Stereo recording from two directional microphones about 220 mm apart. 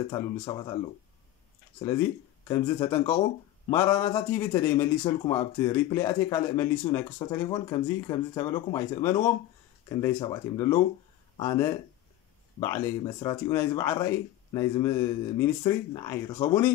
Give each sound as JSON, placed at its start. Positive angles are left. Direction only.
{"t": 0.1, "sound": "speech", "side_deg": 20}
{"t": 1.9, "sound": "speech", "side_deg": 10}